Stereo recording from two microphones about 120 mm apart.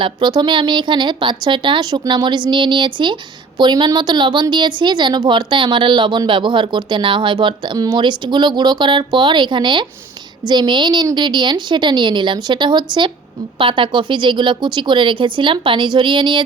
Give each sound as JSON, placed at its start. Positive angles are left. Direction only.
{"t": 0.0, "sound": "a woman's voice", "side_deg": -40}